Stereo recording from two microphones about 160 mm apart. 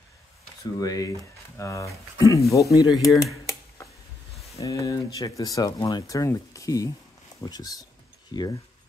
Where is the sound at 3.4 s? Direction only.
20° left (ahead or behind).